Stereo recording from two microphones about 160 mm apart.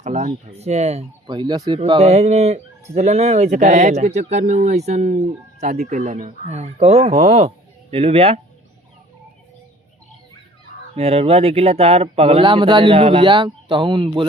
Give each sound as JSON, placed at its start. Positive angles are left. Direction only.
{"t": 0.0, "sound": "speech", "side_deg": -50}
{"t": 1.3, "sound": "speech", "side_deg": -25}
{"t": 1.9, "sound": "speech", "side_deg": -40}
{"t": 10.9, "sound": "speech", "side_deg": -40}